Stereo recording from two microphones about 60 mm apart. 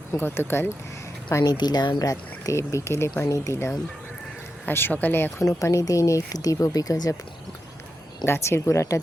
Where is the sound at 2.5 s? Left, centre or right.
Left.